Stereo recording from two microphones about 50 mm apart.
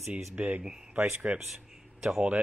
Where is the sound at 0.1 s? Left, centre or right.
Right.